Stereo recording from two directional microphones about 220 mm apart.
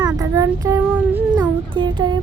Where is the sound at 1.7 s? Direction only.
20° right (ahead or behind).